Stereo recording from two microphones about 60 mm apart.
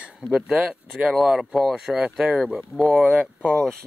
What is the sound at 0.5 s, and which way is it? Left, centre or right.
Speech, centre.